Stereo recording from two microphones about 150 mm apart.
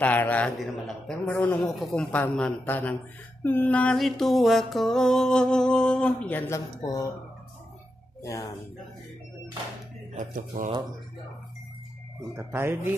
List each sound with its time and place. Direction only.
0.0 s speech: 10° left (ahead or behind)
0.6 s music: centre (ahead or behind)
2.0 s speech: 10° left (ahead or behind)
3.4 s music: 10° left (ahead or behind)
6.8 s speech: 25° left (ahead or behind)
8.2 s speech: 25° left (ahead or behind)
10.1 s speech: 60° right (ahead or behind)
12.4 s speech: 15° right (ahead or behind)